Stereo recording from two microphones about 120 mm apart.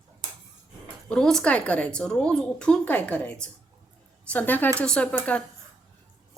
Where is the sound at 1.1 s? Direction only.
5° left (ahead or behind).